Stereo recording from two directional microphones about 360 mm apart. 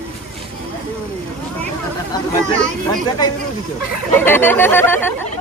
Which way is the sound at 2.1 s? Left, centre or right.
Centre.